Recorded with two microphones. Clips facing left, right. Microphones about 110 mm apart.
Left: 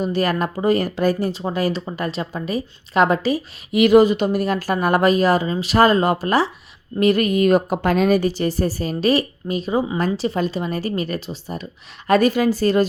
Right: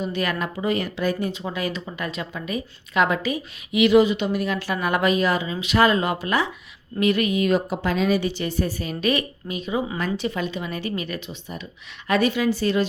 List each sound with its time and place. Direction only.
0.0 s a woman's voice: 40° left (ahead or behind)